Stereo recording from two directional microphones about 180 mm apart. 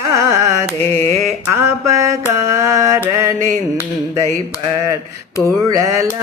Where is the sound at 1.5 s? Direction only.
15° right (ahead or behind).